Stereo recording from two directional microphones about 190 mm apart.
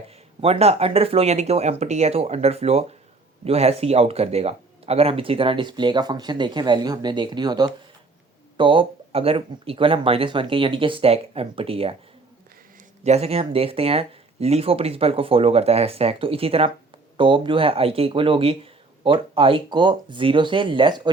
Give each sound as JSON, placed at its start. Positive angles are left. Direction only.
{"t": 0.4, "sound": "speech", "side_deg": -30}
{"t": 13.1, "sound": "speech", "side_deg": -35}